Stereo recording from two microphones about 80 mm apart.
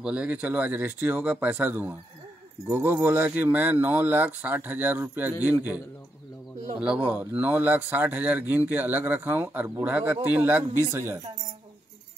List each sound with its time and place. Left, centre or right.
0.0 s speech: centre
7.0 s speech: right